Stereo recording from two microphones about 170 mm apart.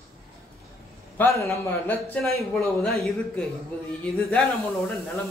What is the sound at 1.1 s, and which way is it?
Speech, 15° left (ahead or behind).